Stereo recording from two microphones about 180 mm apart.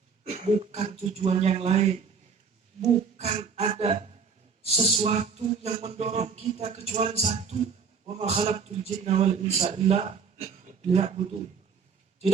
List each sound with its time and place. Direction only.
0.3 s a man's voice: 40° right (ahead or behind)